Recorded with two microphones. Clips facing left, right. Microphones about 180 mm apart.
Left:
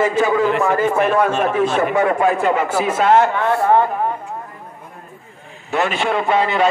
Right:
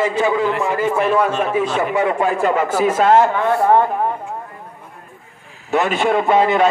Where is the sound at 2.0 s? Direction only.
25° right (ahead or behind); by 3.2 s 40° right (ahead or behind).